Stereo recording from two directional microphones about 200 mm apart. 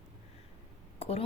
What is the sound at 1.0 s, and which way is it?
Speech, 30° left (ahead or behind).